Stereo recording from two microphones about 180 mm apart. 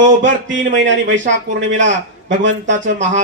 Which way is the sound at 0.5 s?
90° right.